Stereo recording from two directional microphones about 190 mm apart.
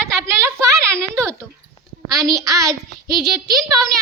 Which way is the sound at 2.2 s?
20° right (ahead or behind).